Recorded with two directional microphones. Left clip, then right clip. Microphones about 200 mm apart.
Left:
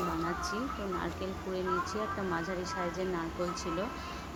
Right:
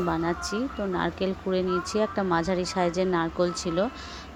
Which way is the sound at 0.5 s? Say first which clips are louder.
Right 7 dB; 35° right (ahead or behind).